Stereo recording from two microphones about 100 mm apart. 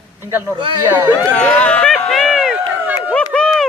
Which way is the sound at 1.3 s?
10° left (ahead or behind).